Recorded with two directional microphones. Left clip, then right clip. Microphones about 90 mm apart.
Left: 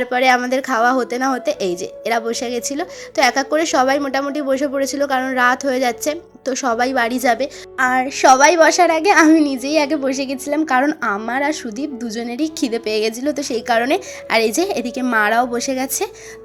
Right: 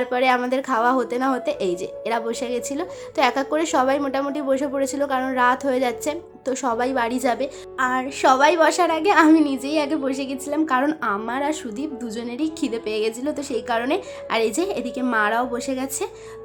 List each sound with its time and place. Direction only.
0.0 s a woman's voice: 25° left (ahead or behind); by 16.0 s 40° left (ahead or behind)